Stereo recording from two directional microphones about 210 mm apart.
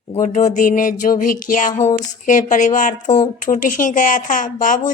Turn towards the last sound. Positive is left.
turn(degrees=40)  # may be behind; listen again after turning